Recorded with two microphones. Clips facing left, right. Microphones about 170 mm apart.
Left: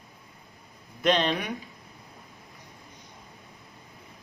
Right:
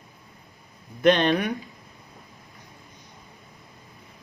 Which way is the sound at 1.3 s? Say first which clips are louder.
Right 6 dB; 45° right (ahead or behind).